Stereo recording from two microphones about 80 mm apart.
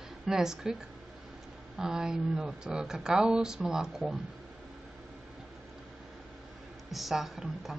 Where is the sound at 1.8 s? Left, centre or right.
Centre.